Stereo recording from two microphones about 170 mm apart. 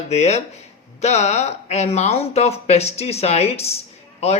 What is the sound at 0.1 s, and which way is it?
Speech, 40° left (ahead or behind).